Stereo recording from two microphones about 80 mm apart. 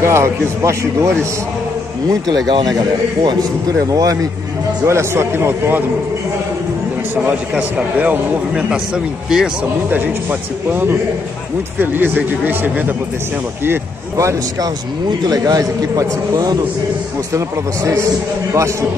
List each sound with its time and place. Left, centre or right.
0.0 s a man's voice: right
3.9 s a man's voice: right
4.8 s a man's voice: right
7.2 s a man's voice: centre
10.7 s speech: right
14.1 s a man's voice: right
15.2 s a man's voice: right
18.5 s a man's voice: right